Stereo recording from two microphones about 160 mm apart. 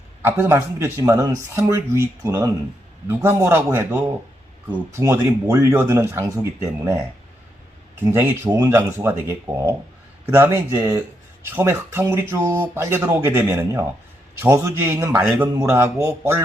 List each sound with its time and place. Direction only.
0.2 s speech: 15° right (ahead or behind)
7.9 s speech: 15° right (ahead or behind)
8.4 s speech: 25° right (ahead or behind)